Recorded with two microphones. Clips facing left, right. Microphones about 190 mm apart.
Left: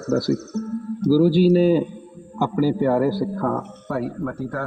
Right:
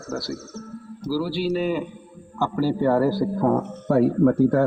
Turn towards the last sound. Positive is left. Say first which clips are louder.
# right 10 dB
turn(degrees=-30)  # may be behind; listen again after turning